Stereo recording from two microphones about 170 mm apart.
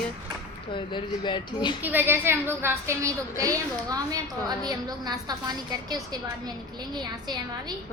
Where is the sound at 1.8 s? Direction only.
10° right (ahead or behind).